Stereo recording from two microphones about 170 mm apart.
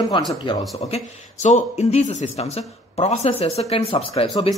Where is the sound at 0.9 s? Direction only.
45° left (ahead or behind).